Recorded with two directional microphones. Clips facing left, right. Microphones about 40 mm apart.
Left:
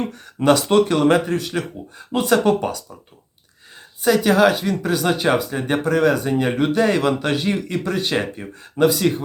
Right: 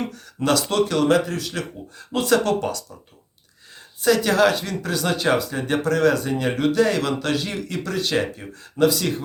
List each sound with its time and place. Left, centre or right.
0.1 s speech: left
4.0 s speech: centre